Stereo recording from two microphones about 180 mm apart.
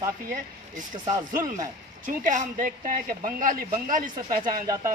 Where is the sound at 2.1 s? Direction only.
45° right (ahead or behind).